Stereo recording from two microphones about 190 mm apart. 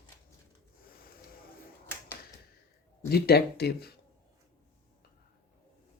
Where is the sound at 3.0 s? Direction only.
55° left (ahead or behind).